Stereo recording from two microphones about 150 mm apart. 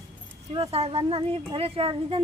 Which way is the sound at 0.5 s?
40° right (ahead or behind).